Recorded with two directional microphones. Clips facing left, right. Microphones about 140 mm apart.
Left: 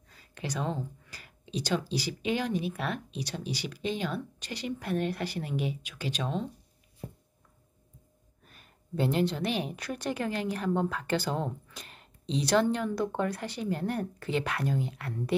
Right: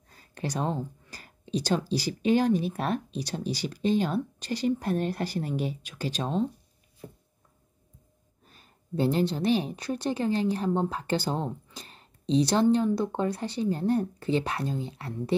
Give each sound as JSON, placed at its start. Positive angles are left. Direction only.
{"t": 0.1, "sound": "speech", "side_deg": -40}
{"t": 8.5, "sound": "speech", "side_deg": -35}
{"t": 11.7, "sound": "a sound", "side_deg": -35}
{"t": 12.7, "sound": "speech", "side_deg": -30}